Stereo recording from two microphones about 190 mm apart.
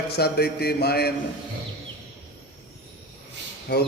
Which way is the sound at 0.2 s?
55° left (ahead or behind).